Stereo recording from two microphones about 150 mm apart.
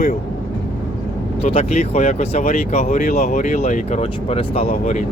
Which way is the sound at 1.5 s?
45° left (ahead or behind).